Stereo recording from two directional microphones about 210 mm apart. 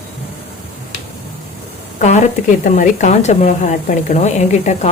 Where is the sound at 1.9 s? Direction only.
35° left (ahead or behind).